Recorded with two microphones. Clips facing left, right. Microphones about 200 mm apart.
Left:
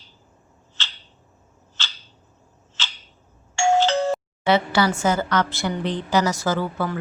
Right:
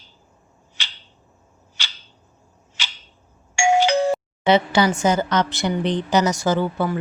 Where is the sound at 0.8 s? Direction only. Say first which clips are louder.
Left 1 dB; 15° right (ahead or behind).